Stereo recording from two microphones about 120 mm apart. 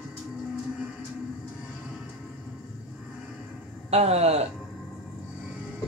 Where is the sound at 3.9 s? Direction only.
60° right (ahead or behind).